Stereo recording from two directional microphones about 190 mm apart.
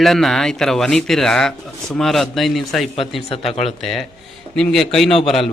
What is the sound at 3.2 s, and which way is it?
Speech, 30° left (ahead or behind).